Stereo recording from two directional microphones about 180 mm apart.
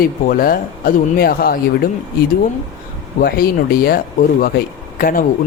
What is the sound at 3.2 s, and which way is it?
A man's voice, 55° left (ahead or behind).